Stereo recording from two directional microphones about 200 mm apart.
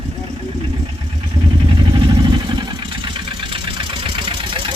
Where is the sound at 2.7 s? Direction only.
25° right (ahead or behind).